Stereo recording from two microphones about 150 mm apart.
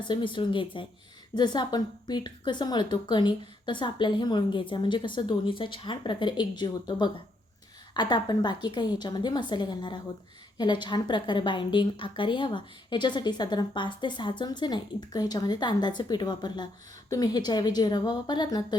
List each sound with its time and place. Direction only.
0.1 s a woman's voice: 30° left (ahead or behind)